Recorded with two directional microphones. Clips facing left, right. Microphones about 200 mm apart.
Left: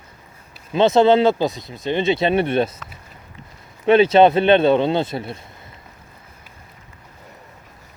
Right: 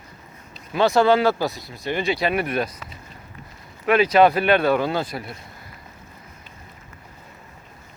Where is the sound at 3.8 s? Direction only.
25° left (ahead or behind).